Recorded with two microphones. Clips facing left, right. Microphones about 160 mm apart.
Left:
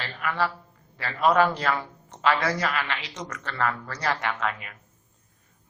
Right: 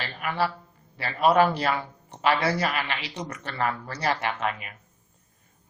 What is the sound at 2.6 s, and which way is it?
Speech, 15° right (ahead or behind).